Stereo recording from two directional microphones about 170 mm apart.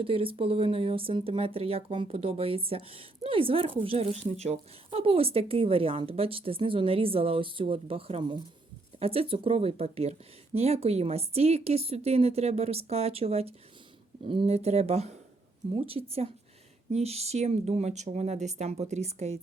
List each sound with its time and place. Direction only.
0.0 s speech: 35° right (ahead or behind)